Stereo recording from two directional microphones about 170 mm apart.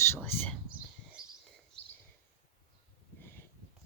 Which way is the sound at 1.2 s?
5° right (ahead or behind).